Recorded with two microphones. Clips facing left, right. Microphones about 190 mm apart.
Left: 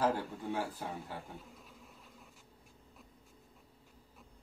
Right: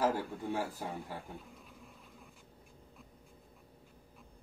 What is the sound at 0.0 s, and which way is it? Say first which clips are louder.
A man's voice: right 1 dB; 10° right (ahead or behind).